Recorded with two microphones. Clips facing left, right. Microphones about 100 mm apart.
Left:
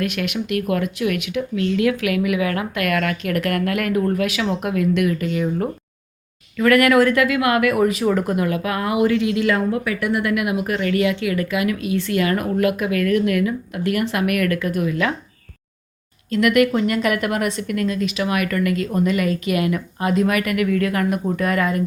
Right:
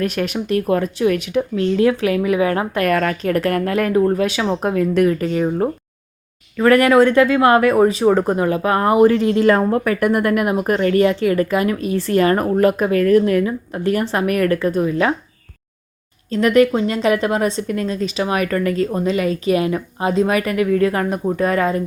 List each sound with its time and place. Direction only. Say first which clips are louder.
0.0 s speech: right 3 dB; 35° right (ahead or behind)
16.3 s speech: right 2 dB; 30° right (ahead or behind)